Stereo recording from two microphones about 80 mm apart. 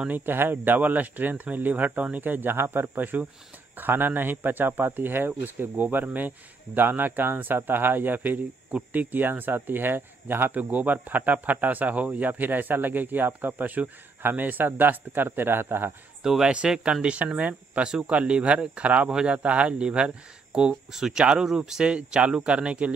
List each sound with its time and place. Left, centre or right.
0.1 s speech: right
16.2 s speech: centre